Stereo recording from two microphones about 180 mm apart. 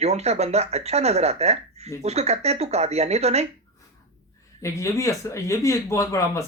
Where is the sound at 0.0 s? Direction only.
35° right (ahead or behind).